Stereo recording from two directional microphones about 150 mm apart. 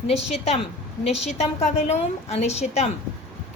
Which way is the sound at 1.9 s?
45° left (ahead or behind).